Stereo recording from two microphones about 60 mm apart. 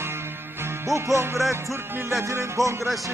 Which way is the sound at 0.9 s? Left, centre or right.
Right.